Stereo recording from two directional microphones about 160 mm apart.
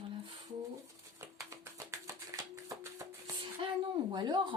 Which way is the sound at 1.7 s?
20° right (ahead or behind).